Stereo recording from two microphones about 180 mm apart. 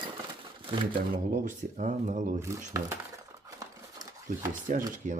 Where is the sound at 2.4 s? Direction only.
15° right (ahead or behind).